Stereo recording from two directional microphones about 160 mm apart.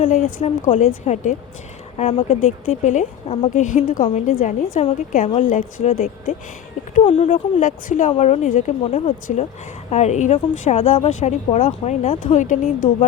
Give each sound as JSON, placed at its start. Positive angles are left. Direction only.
{"t": 0.0, "sound": "a woman's voice", "side_deg": 55}
{"t": 7.6, "sound": "a woman's voice", "side_deg": 55}
{"t": 8.8, "sound": "a woman's voice", "side_deg": 40}